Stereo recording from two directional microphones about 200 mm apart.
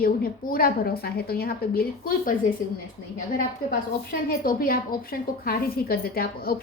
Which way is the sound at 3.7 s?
45° left (ahead or behind).